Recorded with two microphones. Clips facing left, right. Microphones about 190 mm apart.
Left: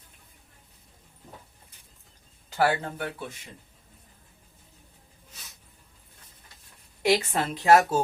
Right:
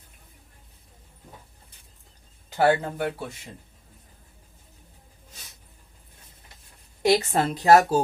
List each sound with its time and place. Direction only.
2.6 s speech: 25° right (ahead or behind)
7.0 s a woman's voice: 40° right (ahead or behind)